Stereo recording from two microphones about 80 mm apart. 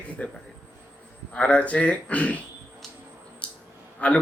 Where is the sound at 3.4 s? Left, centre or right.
Centre.